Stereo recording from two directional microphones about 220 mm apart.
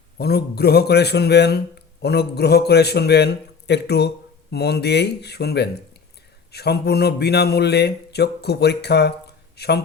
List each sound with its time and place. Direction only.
0.2 s speech: 45° left (ahead or behind)